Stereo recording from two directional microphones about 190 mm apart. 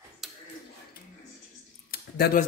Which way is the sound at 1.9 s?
55° left (ahead or behind).